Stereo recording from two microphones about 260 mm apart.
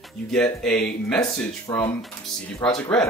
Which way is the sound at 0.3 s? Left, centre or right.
Centre.